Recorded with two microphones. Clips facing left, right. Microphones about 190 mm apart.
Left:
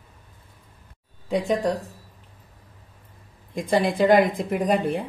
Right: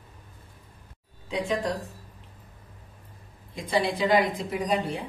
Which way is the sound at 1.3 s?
45° left (ahead or behind).